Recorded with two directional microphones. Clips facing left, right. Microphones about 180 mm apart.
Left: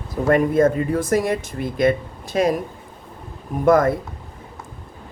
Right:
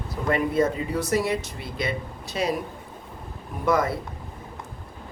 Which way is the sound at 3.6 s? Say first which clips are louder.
Left 7 dB; 50° left (ahead or behind).